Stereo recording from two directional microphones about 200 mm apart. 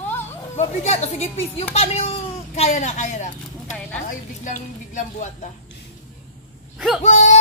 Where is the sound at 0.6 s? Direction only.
35° left (ahead or behind).